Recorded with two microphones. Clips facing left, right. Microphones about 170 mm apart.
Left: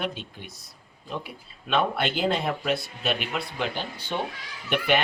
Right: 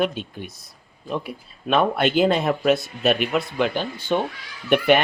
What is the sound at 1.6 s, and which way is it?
Speech, 50° right (ahead or behind).